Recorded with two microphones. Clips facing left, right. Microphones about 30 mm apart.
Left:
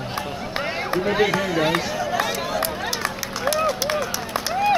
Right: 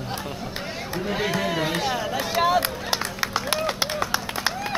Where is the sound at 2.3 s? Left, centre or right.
Centre.